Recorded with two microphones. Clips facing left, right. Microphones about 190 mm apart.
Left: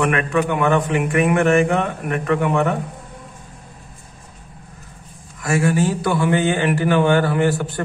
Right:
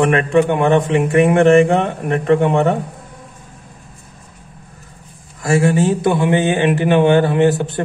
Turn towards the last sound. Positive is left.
turn(degrees=-20)  # may be behind; listen again after turning